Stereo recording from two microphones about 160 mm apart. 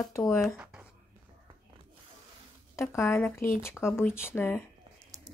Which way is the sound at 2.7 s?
15° left (ahead or behind).